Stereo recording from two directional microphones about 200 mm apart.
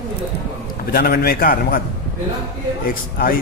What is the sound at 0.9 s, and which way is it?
Speech, 50° left (ahead or behind).